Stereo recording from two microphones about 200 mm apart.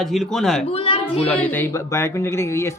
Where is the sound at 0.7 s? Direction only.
30° left (ahead or behind).